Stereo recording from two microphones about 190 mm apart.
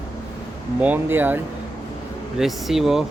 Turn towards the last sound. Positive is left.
turn(degrees=0)  # may be behind; listen again after turning